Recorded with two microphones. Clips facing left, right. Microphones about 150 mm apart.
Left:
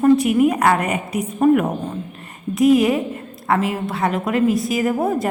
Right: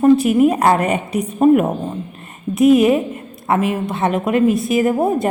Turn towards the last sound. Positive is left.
turn(degrees=-20)  # may be behind; listen again after turning